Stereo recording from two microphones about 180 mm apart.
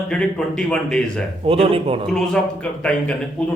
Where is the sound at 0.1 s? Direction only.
5° left (ahead or behind).